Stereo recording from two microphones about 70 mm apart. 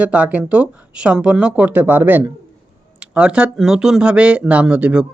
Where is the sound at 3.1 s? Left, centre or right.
Centre.